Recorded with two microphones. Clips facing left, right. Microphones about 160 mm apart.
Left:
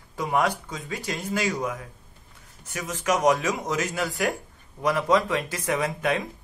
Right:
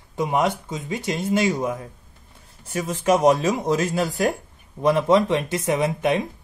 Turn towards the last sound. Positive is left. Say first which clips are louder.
# right 4 dB
turn(degrees=-25)  # may be behind; listen again after turning